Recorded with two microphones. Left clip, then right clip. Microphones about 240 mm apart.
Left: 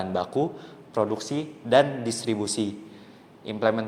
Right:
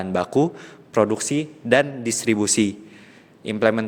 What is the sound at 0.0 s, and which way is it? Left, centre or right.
Speech, right.